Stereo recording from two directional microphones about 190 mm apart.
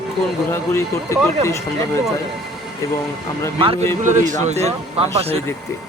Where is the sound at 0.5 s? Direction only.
15° left (ahead or behind).